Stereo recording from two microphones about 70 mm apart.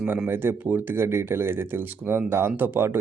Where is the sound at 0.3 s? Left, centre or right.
Right.